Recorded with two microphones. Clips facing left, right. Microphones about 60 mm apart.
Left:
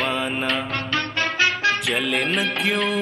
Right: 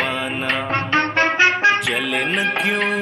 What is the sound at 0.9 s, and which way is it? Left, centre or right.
Music, right.